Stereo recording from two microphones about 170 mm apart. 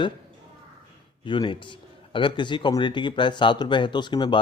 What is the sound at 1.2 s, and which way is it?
A man's voice, 30° left (ahead or behind).